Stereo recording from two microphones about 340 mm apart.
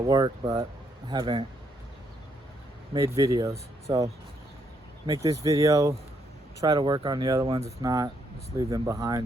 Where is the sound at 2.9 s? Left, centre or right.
Centre.